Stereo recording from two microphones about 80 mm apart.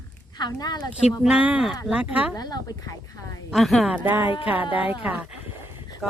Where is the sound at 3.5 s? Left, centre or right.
Centre.